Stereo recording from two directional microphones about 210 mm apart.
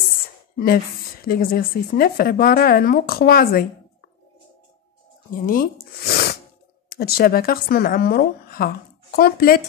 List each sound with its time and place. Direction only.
0.6 s a woman's voice: 45° left (ahead or behind)
5.3 s speech: 40° left (ahead or behind)
6.0 s sneeze: 45° left (ahead or behind)
6.9 s a woman's voice: 45° left (ahead or behind)